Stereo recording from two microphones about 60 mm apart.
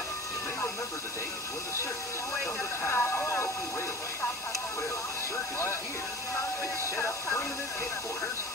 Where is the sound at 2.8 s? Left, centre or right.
Left.